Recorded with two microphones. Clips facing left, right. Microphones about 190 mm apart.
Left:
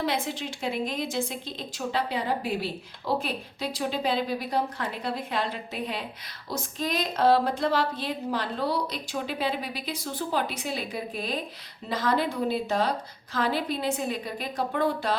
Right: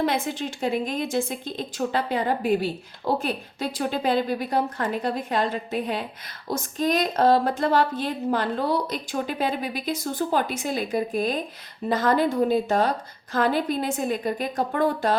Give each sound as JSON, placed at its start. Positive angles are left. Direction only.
{"t": 0.0, "sound": "a woman's voice", "side_deg": -50}